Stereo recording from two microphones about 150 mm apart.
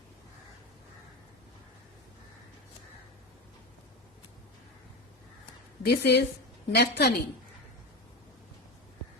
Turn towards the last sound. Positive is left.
turn(degrees=90)